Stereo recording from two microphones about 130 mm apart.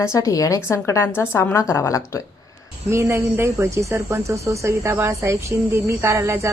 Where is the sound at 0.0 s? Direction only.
25° left (ahead or behind).